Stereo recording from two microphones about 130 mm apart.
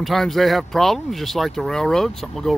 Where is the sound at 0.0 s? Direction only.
Centre (ahead or behind).